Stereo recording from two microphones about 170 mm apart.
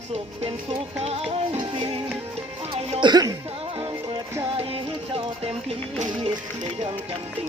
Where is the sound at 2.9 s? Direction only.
25° right (ahead or behind).